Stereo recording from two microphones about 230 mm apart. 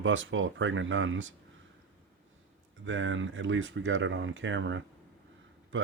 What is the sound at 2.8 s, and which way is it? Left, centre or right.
Speech, right.